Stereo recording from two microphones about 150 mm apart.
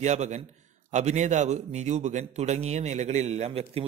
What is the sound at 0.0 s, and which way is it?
Speech, 50° right (ahead or behind).